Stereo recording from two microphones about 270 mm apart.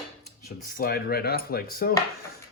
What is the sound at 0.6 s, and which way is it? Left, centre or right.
Speech, left.